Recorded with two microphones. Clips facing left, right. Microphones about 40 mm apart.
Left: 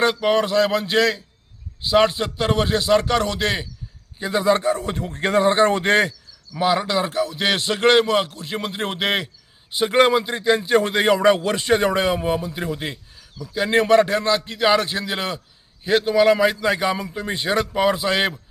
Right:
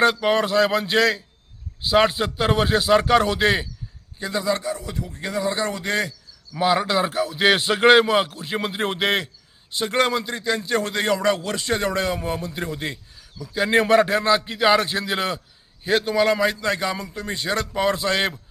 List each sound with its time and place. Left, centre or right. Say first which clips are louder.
0.0 s a man's voice: even; centre
4.2 s a man's voice: left 5 dB; left
6.5 s a man's voice: even; centre
9.7 s a man's voice: left 5 dB; centre
17.7 s a man's voice: left 2 dB; centre